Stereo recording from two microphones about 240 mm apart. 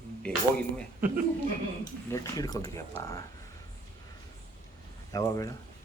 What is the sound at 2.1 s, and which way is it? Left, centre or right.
Speech, centre.